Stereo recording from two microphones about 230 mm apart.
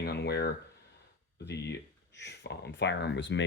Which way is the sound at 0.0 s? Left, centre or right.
Left.